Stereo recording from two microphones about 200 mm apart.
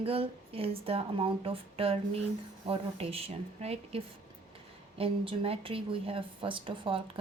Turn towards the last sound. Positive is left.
turn(degrees=-25)  # may be behind; listen again after turning